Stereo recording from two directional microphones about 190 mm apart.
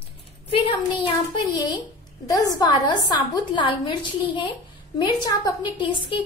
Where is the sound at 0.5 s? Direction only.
25° left (ahead or behind).